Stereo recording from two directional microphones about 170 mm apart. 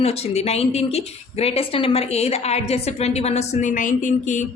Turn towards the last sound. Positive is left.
turn(degrees=45)  # may be behind; listen again after turning